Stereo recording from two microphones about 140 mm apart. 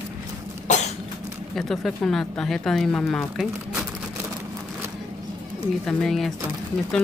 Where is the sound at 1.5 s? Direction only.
Centre (ahead or behind).